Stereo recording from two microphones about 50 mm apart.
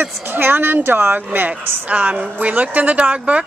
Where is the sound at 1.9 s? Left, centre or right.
Right.